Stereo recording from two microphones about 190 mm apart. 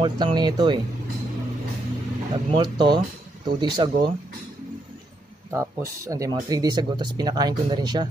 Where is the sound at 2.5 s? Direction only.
25° right (ahead or behind).